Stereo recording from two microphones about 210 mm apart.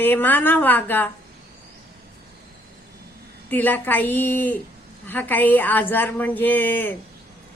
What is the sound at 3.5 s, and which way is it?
A woman's voice, 10° left (ahead or behind).